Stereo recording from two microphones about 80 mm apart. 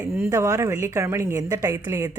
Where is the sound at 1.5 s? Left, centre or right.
Right.